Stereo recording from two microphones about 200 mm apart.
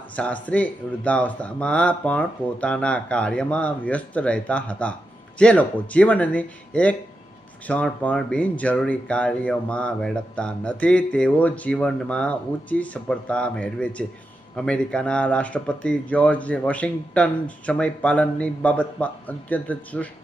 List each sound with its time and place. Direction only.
0.1 s speech: 5° left (ahead or behind)